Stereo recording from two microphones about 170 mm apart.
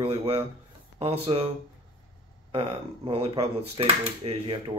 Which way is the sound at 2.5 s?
35° right (ahead or behind).